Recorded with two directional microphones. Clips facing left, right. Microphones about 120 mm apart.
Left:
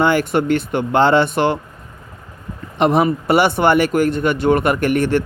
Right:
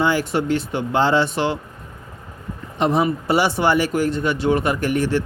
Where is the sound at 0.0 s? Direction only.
60° left (ahead or behind).